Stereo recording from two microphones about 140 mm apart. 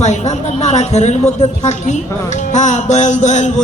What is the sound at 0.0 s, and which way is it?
A man's voice, 55° left (ahead or behind).